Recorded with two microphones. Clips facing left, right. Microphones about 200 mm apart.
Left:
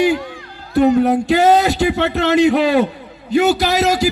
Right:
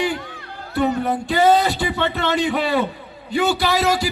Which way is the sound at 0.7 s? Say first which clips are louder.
Left 8 dB; 40° left (ahead or behind).